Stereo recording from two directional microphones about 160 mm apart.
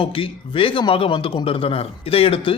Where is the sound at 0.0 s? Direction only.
35° left (ahead or behind).